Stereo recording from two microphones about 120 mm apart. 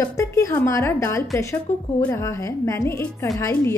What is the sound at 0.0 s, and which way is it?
Music, 25° left (ahead or behind).